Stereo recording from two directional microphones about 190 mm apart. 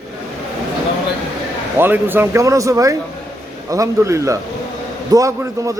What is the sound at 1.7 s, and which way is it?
Speech, 10° right (ahead or behind).